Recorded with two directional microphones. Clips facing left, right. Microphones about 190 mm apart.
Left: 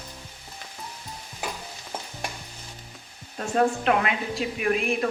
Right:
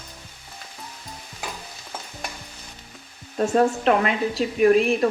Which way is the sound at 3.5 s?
35° right (ahead or behind).